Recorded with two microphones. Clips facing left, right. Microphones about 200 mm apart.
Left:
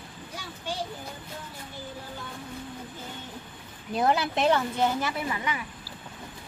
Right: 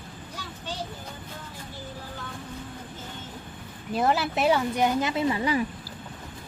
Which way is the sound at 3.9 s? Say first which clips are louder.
Even; centre (ahead or behind).